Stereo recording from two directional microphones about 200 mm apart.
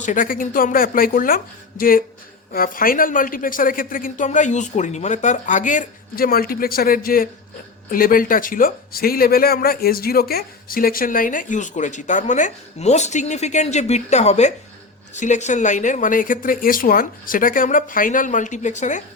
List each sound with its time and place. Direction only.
0.0 s speech: 40° left (ahead or behind)